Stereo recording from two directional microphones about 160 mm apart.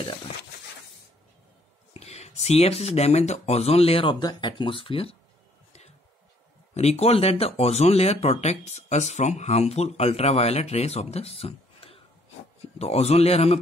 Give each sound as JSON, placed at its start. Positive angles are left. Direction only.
{"t": 2.0, "sound": "speech", "side_deg": 40}
{"t": 5.7, "sound": "a sound", "side_deg": 45}
{"t": 6.7, "sound": "speech", "side_deg": 40}